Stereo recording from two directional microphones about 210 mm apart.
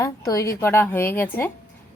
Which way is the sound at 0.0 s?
15° left (ahead or behind).